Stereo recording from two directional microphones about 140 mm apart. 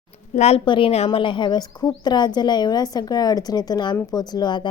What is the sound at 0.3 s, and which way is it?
A woman's voice, 45° left (ahead or behind).